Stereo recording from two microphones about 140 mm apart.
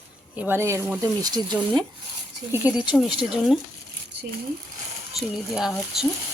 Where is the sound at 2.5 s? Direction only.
10° right (ahead or behind).